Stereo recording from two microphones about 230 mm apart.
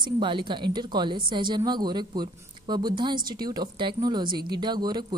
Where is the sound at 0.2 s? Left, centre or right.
Right.